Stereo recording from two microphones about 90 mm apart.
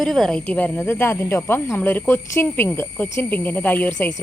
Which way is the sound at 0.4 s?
20° left (ahead or behind).